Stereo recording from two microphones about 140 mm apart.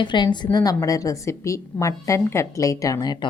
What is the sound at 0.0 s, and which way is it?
A woman's voice, 35° left (ahead or behind).